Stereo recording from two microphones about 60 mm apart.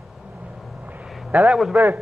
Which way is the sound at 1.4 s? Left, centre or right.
Centre.